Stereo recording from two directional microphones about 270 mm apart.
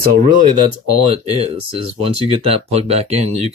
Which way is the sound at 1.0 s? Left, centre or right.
Right.